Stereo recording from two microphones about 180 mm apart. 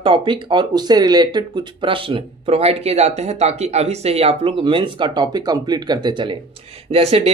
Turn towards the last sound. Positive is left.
turn(degrees=-35)  # may be behind; listen again after turning